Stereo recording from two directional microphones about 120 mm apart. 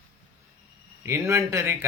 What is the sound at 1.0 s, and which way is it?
Speech, 25° right (ahead or behind).